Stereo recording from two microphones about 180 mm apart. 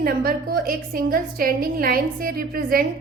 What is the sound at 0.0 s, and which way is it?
A woman's voice, 55° right (ahead or behind).